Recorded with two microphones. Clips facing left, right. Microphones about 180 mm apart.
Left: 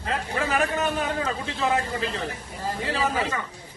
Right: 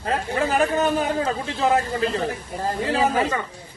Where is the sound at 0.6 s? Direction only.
35° right (ahead or behind).